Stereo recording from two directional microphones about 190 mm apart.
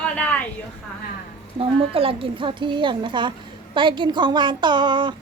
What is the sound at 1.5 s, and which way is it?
A woman's voice, 30° right (ahead or behind).